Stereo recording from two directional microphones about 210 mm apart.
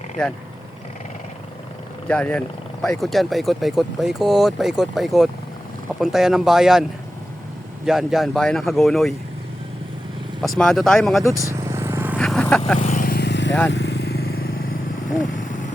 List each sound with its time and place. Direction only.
2.0 s speech: 5° left (ahead or behind)
7.9 s speech: centre (ahead or behind)
10.4 s speech: centre (ahead or behind)
11.2 s speech: 15° left (ahead or behind)
11.4 s vehicle: 15° right (ahead or behind)
12.1 s vehicle: 5° left (ahead or behind)
12.8 s vehicle: 35° left (ahead or behind)